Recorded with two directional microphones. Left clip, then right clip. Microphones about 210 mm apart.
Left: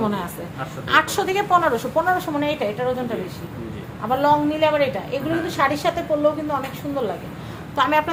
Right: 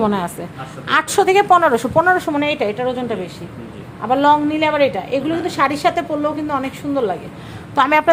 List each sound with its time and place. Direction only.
0.0 s a woman's voice: 50° right (ahead or behind)
4.2 s a woman's voice: 45° right (ahead or behind)